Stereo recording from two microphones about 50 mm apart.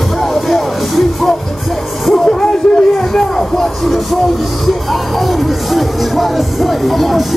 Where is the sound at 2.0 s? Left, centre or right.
Centre.